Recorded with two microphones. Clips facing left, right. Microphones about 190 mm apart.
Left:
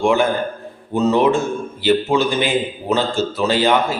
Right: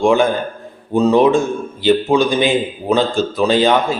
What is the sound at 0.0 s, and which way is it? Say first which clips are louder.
A man's voice: right 3 dB; 15° right (ahead or behind).